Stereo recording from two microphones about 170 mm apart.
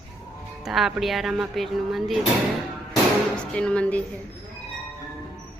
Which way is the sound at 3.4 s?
5° left (ahead or behind).